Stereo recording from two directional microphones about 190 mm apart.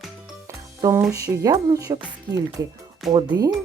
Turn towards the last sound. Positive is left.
turn(degrees=-20)  # may be behind; listen again after turning